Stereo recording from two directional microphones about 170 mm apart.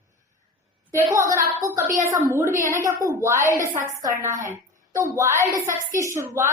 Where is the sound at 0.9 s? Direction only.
15° right (ahead or behind).